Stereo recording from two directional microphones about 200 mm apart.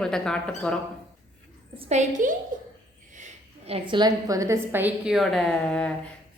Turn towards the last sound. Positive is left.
turn(degrees=5)  # may be behind; listen again after turning